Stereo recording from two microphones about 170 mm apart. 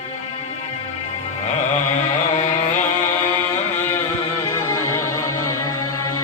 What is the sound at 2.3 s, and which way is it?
Music, 45° left (ahead or behind).